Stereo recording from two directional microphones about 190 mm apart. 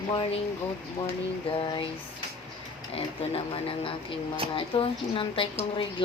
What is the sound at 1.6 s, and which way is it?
Speech, 25° left (ahead or behind).